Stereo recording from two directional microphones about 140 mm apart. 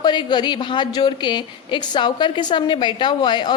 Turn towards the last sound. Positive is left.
turn(degrees=35)  # may be behind; listen again after turning